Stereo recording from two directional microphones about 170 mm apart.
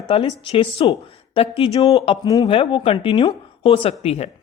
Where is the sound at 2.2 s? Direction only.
20° left (ahead or behind).